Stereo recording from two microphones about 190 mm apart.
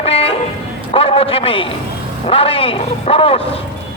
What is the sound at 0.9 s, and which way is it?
A man's voice, 30° left (ahead or behind).